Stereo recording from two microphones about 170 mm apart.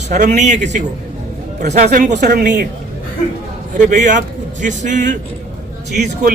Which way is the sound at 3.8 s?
45° right (ahead or behind).